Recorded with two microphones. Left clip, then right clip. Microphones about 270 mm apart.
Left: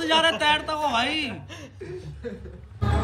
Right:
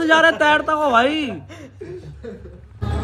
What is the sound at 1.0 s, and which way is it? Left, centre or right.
Speech, centre.